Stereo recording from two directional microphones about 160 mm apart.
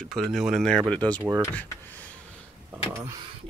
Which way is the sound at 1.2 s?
10° right (ahead or behind).